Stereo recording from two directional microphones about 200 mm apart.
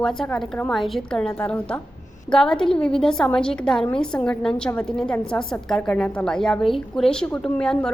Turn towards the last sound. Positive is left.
turn(degrees=5)  # may be behind; listen again after turning